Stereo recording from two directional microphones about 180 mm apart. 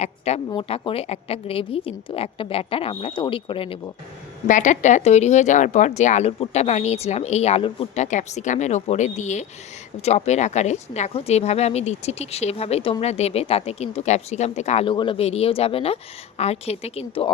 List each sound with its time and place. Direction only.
0.0 s a woman's voice: 35° left (ahead or behind)
4.4 s a woman's voice: 45° left (ahead or behind)